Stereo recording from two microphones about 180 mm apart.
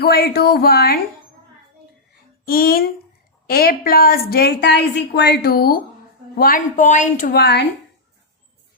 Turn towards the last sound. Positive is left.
turn(degrees=65)  # may be behind; listen again after turning